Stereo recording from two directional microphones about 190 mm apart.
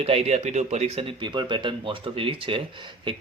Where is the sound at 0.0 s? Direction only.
30° right (ahead or behind).